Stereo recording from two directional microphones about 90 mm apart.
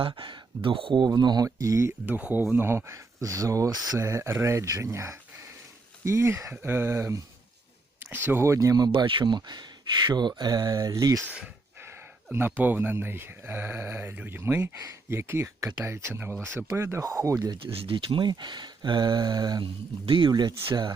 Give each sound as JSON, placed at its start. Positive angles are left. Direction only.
{"t": 0.0, "sound": "speech", "side_deg": -70}
{"t": 1.0, "sound": "speech", "side_deg": -50}
{"t": 1.5, "sound": "speech", "side_deg": -35}
{"t": 2.0, "sound": "speech", "side_deg": -20}
{"t": 8.9, "sound": "speech", "side_deg": -70}
{"t": 12.3, "sound": "speech", "side_deg": -20}
{"t": 17.6, "sound": "speech", "side_deg": -90}
{"t": 20.1, "sound": "speech", "side_deg": -65}